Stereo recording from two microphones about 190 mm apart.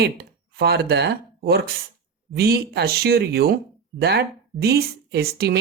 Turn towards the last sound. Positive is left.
turn(degrees=-60)  # may be behind; listen again after turning